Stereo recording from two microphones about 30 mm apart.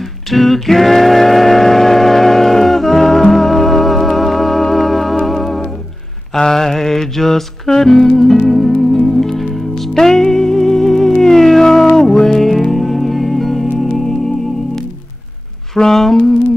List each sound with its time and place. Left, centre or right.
0.3 s singing: centre
6.3 s music: centre
9.9 s music: centre
11.1 s cat: centre
11.6 s music: centre
12.7 s music: centre
15.7 s a sound: centre